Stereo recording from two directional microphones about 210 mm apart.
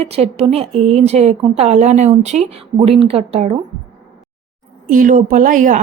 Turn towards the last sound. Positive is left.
turn(degrees=-40)  # may be behind; listen again after turning